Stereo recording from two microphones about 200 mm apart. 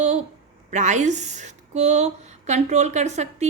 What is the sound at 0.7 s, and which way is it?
A woman's voice, 35° right (ahead or behind).